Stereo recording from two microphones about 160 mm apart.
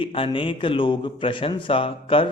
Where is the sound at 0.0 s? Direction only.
35° left (ahead or behind).